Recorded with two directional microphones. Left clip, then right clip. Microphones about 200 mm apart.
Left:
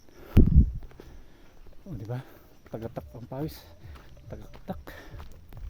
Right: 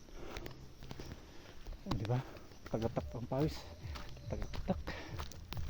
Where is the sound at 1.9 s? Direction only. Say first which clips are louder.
Right 3 dB; 20° left (ahead or behind).